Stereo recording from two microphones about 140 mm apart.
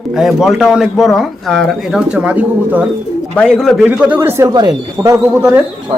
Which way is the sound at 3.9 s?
10° right (ahead or behind).